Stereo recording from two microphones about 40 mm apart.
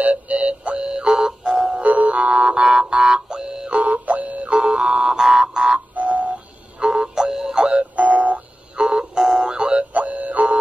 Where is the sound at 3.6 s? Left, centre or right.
Right.